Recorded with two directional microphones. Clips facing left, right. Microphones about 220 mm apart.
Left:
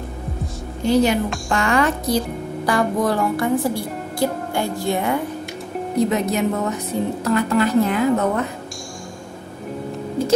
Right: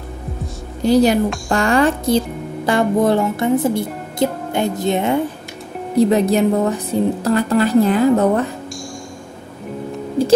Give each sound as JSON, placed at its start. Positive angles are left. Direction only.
{"t": 0.8, "sound": "a woman's voice", "side_deg": -35}
{"t": 1.5, "sound": "music", "side_deg": -30}
{"t": 5.9, "sound": "a woman's voice", "side_deg": -35}